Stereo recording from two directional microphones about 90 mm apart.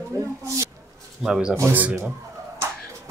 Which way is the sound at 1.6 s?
20° right (ahead or behind).